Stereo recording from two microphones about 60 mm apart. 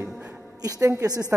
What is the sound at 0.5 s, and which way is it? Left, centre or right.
Speech, right.